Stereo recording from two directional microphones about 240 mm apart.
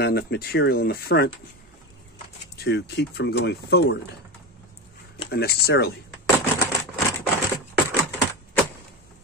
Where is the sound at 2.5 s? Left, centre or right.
Left.